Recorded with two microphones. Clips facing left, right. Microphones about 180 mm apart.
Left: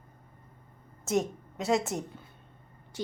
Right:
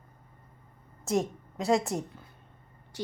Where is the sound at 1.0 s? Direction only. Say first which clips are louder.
Even; centre (ahead or behind).